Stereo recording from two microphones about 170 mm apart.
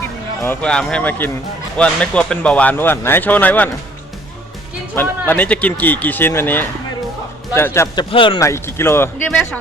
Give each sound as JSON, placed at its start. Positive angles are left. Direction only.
{"t": 0.4, "sound": "speech", "side_deg": 5}
{"t": 4.9, "sound": "speech", "side_deg": 10}
{"t": 7.9, "sound": "speech", "side_deg": 30}
{"t": 8.4, "sound": "speech", "side_deg": 15}